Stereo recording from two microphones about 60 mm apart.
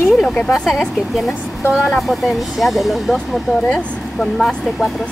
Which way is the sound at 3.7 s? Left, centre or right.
Centre.